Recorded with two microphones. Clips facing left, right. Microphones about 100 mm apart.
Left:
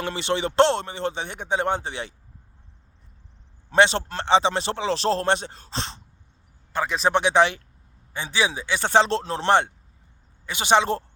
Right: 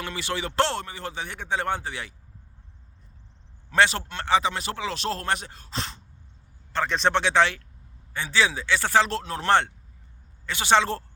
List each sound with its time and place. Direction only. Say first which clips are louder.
0.0 s speech: left 5 dB; 25° left (ahead or behind)
3.7 s speech: left 3 dB; 25° left (ahead or behind)
6.7 s speech: left 1 dB; 5° left (ahead or behind); by 9.5 s 25° left (ahead or behind)
9.5 s speech: left 2 dB; 15° left (ahead or behind)